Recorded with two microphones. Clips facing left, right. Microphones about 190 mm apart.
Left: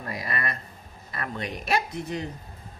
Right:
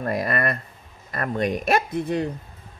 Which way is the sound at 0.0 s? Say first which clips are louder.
Right 8 dB; 55° right (ahead or behind).